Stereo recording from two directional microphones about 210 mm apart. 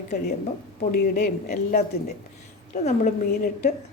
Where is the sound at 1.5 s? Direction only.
40° left (ahead or behind).